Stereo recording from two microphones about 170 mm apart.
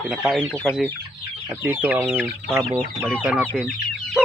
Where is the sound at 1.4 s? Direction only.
10° right (ahead or behind).